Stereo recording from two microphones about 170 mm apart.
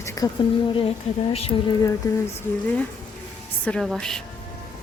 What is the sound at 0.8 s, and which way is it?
Speech, 35° left (ahead or behind).